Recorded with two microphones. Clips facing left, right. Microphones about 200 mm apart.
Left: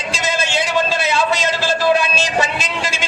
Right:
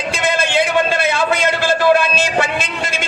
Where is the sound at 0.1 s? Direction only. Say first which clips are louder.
Right 3 dB; 55° right (ahead or behind).